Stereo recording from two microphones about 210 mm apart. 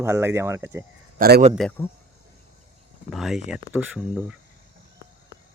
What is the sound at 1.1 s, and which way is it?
Speech, 45° right (ahead or behind).